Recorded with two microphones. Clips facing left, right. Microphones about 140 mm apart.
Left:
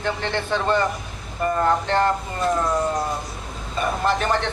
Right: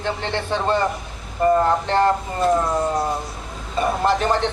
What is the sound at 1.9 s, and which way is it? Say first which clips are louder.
Speech: right 2 dB; 30° right (ahead or behind).